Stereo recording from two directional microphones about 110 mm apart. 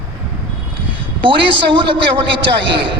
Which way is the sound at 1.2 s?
50° right (ahead or behind).